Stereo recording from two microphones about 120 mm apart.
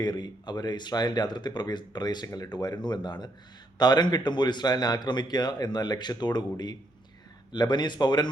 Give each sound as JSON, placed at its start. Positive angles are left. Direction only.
{"t": 0.0, "sound": "speech", "side_deg": 35}